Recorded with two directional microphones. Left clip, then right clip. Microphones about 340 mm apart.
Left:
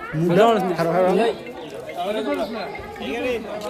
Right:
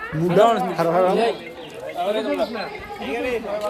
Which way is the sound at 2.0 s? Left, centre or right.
Right.